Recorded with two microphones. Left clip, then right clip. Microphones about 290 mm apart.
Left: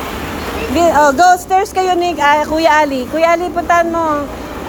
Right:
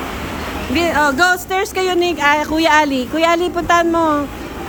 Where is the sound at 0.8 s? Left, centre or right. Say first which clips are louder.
Left 5 dB; centre.